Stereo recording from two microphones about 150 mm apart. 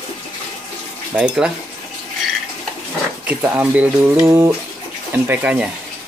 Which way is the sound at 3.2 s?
10° right (ahead or behind).